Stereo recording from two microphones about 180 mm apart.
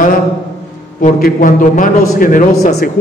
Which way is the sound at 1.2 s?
45° left (ahead or behind).